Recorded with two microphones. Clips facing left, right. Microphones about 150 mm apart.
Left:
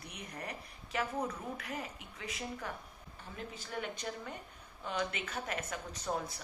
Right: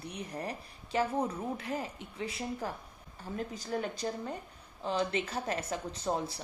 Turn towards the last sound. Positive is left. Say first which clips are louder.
# right 4 dB
turn(degrees=-30)  # may be behind; listen again after turning